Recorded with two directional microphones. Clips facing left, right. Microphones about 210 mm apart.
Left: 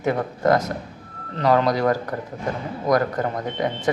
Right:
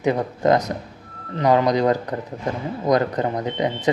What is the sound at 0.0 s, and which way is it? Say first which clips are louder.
Speech: right 2 dB; 20° right (ahead or behind).